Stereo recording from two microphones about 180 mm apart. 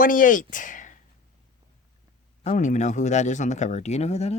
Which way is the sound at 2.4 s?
40° left (ahead or behind).